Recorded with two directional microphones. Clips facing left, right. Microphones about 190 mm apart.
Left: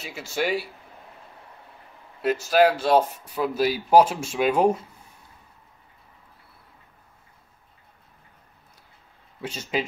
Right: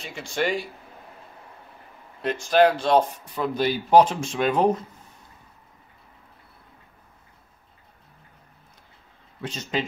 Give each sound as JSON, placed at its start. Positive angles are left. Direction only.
{"t": 0.0, "sound": "speech", "side_deg": 5}
{"t": 2.2, "sound": "speech", "side_deg": 5}
{"t": 9.4, "sound": "speech", "side_deg": 10}